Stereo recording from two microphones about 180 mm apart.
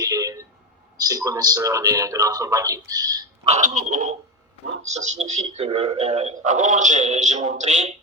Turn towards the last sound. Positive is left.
turn(degrees=-40)  # may be behind; listen again after turning